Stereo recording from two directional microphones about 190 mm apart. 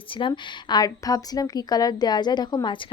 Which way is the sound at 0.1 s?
25° left (ahead or behind).